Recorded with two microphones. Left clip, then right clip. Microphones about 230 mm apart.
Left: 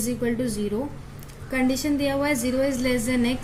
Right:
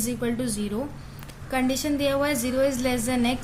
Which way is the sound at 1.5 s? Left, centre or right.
Right.